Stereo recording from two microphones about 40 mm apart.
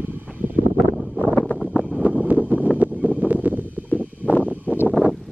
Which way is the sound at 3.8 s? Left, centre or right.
Left.